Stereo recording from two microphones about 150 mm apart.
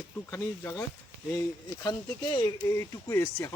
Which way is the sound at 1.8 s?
25° left (ahead or behind).